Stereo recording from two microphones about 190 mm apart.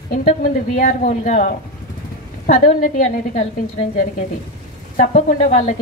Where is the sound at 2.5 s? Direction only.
45° left (ahead or behind).